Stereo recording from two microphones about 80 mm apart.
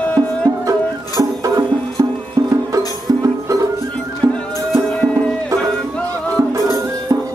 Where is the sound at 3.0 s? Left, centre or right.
Right.